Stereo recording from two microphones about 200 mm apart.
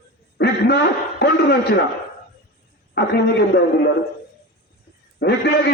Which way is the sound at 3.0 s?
55° left (ahead or behind).